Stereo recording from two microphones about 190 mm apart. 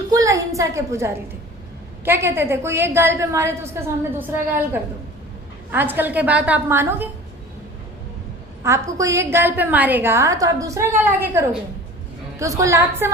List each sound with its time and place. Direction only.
0.1 s a woman's voice: 15° right (ahead or behind)
8.6 s a woman's voice: 15° right (ahead or behind)